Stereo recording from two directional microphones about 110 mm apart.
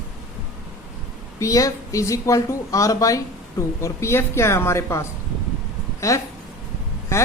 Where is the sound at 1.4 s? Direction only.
30° left (ahead or behind).